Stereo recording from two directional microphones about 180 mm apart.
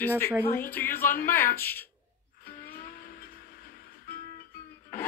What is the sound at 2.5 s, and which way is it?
Music, 55° left (ahead or behind).